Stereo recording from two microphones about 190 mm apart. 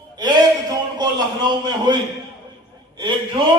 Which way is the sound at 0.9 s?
25° right (ahead or behind).